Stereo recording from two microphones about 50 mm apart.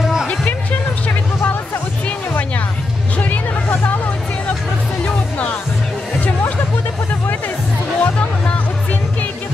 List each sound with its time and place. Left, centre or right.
0.3 s music: left
3.8 s music: left
5.0 s music: left
8.0 s music: left